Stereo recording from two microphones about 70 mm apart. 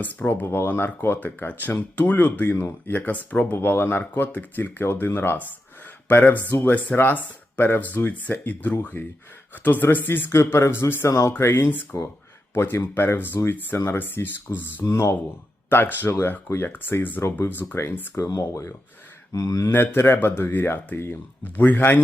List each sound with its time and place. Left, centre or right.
0.0 s speech: left
3.0 s speech: left
11.9 s speech: left
12.5 s speech: left
18.3 s speech: left
19.7 s speech: left